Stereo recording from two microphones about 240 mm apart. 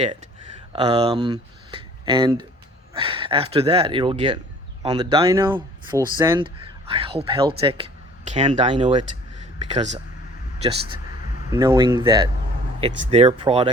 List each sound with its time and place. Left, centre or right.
0.7 s speech: right
10.6 s speech: right